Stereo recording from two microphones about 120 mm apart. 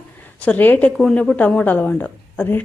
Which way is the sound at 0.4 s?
15° left (ahead or behind).